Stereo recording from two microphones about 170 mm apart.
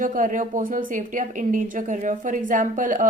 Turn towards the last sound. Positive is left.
turn(degrees=-50)  # may be behind; listen again after turning